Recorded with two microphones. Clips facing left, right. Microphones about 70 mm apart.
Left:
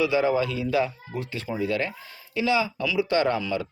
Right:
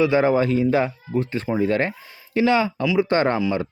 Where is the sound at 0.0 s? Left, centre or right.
Right.